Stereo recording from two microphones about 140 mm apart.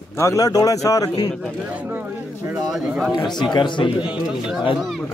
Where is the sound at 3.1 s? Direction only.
30° left (ahead or behind).